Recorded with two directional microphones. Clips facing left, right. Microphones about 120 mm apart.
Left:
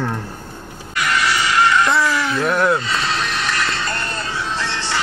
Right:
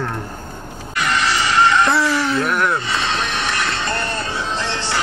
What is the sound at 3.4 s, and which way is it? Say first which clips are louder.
Music: even; 25° right (ahead or behind).